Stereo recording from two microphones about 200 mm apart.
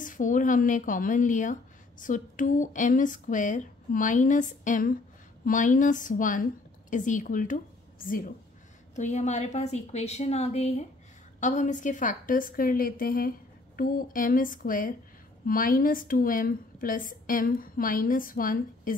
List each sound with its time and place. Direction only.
0.0 s a woman's voice: 40° left (ahead or behind)